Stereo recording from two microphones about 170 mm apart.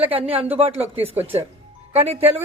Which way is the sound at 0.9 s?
35° right (ahead or behind).